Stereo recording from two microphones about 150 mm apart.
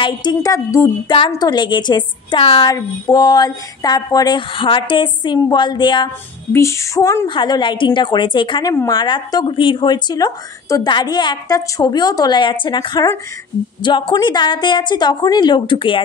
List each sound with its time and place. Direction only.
0.0 s a woman's voice: 30° left (ahead or behind)
6.5 s a woman's voice: 20° left (ahead or behind)